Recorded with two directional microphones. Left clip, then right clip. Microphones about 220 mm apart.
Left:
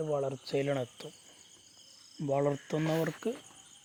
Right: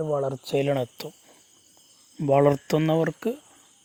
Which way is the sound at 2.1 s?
40° right (ahead or behind).